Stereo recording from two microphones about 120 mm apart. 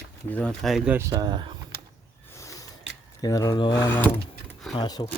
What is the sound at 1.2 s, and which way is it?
Speech, 40° right (ahead or behind).